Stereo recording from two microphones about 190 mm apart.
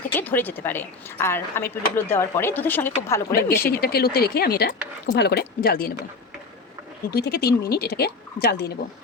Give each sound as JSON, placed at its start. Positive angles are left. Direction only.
{"t": 0.1, "sound": "a woman's voice", "side_deg": 10}
{"t": 3.6, "sound": "speech", "side_deg": 55}
{"t": 7.1, "sound": "speech", "side_deg": 55}